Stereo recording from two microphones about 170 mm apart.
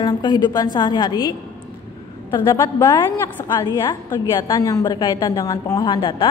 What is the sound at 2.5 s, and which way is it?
A woman's voice, 15° left (ahead or behind).